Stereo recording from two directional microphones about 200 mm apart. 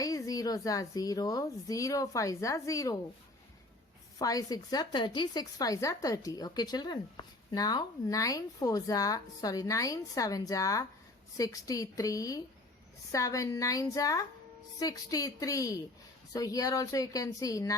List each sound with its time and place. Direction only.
0.0 s a woman's voice: 20° left (ahead or behind)
4.2 s a woman's voice: 20° left (ahead or behind)